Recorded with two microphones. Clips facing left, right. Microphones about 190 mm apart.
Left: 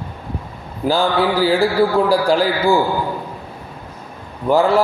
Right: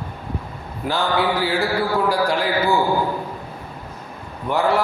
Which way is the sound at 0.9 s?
30° left (ahead or behind).